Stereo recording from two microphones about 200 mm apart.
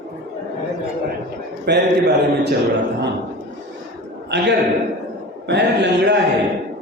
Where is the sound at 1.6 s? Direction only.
55° right (ahead or behind).